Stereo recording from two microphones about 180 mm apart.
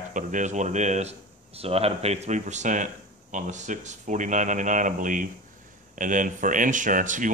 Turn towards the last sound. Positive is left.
turn(degrees=-45)  # may be behind; listen again after turning